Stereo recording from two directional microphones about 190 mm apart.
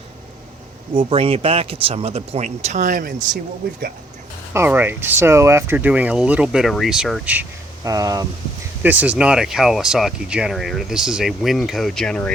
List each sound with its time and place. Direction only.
0.9 s speech: 30° right (ahead or behind)
4.5 s speech: 10° right (ahead or behind)
7.9 s speech: 20° right (ahead or behind); by 12.3 s 5° left (ahead or behind)